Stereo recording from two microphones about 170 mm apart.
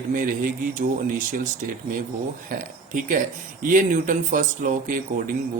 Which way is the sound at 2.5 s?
60° right (ahead or behind).